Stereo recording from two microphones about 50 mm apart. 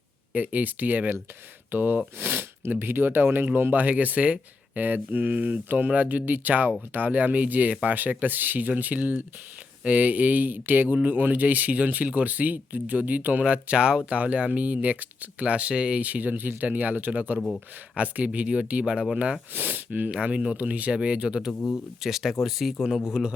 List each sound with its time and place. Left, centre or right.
0.3 s speech: right; by 19.4 s centre
19.5 s speech: right
20.2 s speech: right
22.0 s speech: centre
23.2 s a man's voice: centre